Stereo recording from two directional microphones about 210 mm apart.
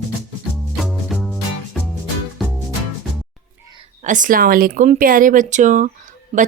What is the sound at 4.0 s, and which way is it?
Speech, 35° right (ahead or behind).